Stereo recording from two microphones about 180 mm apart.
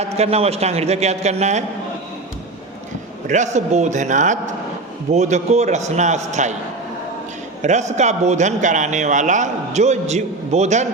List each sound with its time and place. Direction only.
0.0 s a man's voice: 35° right (ahead or behind)
3.2 s a man's voice: 40° right (ahead or behind)
7.6 s a man's voice: 40° right (ahead or behind)